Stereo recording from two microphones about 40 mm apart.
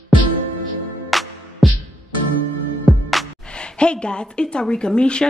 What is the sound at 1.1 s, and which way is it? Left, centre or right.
Music, centre.